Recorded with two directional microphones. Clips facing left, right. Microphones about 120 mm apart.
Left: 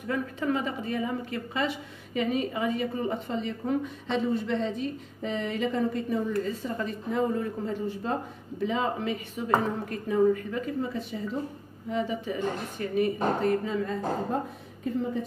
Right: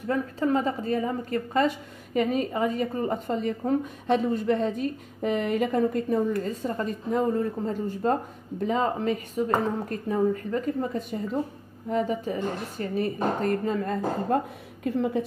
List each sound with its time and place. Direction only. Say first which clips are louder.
0.1 s a woman's voice: right 4 dB; 40° right (ahead or behind)
14.8 s a woman's voice: right 4 dB; 70° right (ahead or behind)